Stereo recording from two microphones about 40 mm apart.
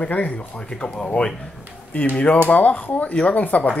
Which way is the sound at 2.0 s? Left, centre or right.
Left.